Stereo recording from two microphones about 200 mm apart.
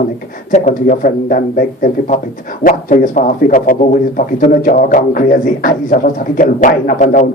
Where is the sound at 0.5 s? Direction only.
40° left (ahead or behind).